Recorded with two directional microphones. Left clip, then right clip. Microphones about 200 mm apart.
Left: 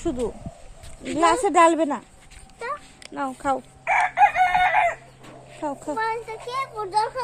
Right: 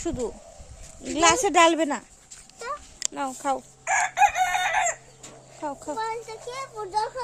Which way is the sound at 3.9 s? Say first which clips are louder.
Left 3 dB; 60° right (ahead or behind).